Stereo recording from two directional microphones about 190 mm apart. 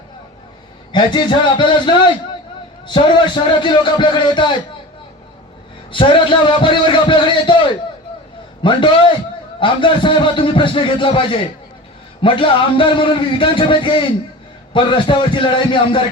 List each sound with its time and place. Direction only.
0.9 s a man's voice: 25° left (ahead or behind)
5.9 s a man's voice: 25° left (ahead or behind)